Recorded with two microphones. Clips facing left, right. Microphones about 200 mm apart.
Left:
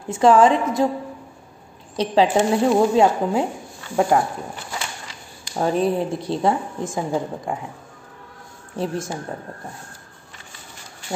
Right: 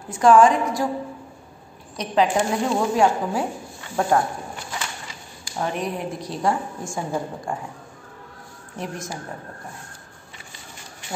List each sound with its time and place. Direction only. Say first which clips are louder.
0.1 s a woman's voice: left 1 dB; 25° left (ahead or behind)
2.0 s a woman's voice: left 3 dB; 30° left (ahead or behind)
3.9 s speech: left 3 dB; 15° left (ahead or behind)
5.6 s a woman's voice: left 7 dB; 30° left (ahead or behind)
8.7 s a woman's voice: left 6 dB; 30° left (ahead or behind)